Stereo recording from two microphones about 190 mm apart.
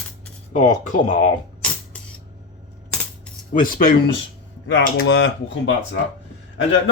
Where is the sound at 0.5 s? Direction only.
40° left (ahead or behind).